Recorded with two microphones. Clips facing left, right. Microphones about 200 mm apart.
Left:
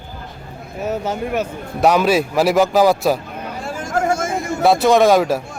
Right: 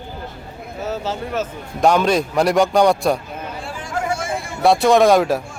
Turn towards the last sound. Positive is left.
turn(degrees=0)  # may be behind; listen again after turning